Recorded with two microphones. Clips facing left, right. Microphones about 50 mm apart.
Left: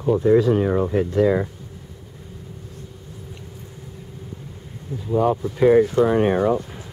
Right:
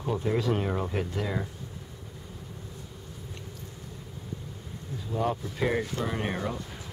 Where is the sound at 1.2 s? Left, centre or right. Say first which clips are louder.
Left 14 dB; left.